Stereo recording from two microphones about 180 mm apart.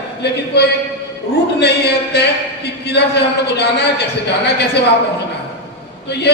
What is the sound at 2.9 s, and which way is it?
A man's voice, 70° left (ahead or behind).